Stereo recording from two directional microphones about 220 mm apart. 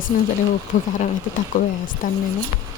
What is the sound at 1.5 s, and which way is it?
Speech, 35° left (ahead or behind).